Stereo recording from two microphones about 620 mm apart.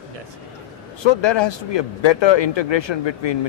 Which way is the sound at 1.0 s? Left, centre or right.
Left.